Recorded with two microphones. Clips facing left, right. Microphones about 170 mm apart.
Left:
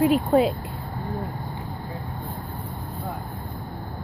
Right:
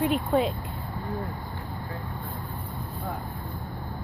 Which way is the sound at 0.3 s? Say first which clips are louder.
Left 4 dB; 40° left (ahead or behind).